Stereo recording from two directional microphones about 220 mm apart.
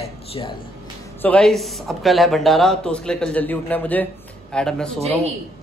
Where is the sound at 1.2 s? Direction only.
5° left (ahead or behind).